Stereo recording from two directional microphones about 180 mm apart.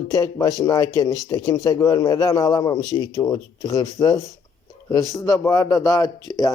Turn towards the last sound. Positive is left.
turn(degrees=20)  # may be behind; listen again after turning